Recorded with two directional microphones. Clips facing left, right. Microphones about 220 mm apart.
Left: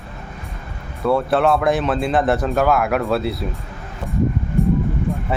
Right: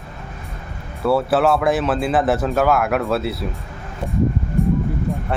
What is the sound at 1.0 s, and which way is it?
Speech, 5° right (ahead or behind).